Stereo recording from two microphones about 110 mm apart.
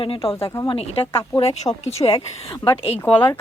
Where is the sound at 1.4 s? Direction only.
85° left.